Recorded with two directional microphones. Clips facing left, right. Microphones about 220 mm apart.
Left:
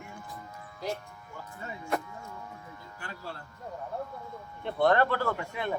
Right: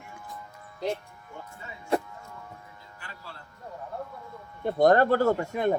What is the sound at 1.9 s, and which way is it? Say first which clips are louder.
Music: right 6 dB; 30° right (ahead or behind).